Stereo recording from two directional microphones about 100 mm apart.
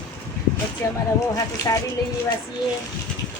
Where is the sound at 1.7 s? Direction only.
35° left (ahead or behind).